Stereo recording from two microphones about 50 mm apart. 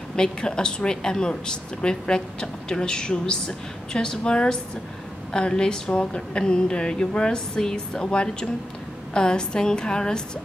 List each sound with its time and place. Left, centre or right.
0.1 s speech: centre